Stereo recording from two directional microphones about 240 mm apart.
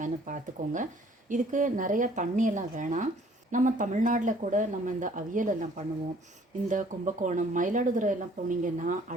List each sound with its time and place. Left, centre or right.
0.0 s speech: right